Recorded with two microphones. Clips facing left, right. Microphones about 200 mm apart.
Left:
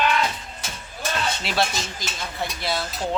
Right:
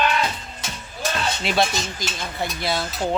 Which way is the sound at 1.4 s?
Centre (ahead or behind).